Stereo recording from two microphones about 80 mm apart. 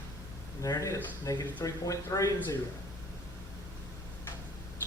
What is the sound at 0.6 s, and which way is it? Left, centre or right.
Speech, left.